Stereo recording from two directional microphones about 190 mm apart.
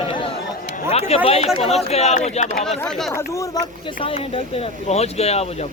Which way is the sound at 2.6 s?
Centre (ahead or behind).